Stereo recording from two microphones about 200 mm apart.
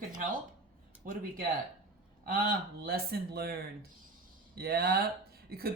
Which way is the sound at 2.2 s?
45° right (ahead or behind).